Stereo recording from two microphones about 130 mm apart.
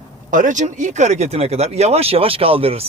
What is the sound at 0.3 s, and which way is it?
Speech, 85° right.